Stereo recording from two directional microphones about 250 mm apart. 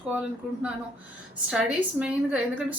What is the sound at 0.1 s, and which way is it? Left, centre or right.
A woman's voice, centre.